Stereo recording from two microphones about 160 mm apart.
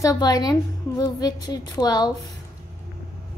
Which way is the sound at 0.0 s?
25° left (ahead or behind).